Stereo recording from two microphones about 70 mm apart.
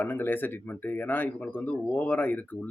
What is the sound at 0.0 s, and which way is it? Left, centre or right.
Speech, left.